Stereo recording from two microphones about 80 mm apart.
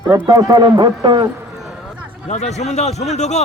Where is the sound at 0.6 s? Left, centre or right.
Right.